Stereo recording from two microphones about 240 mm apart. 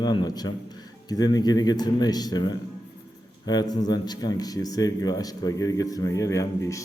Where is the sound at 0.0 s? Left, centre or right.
Centre.